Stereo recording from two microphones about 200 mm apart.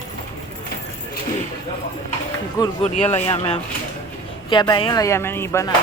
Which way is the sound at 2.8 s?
30° left (ahead or behind).